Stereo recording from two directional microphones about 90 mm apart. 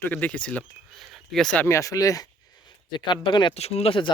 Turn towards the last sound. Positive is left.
turn(degrees=75)  # may be behind; listen again after turning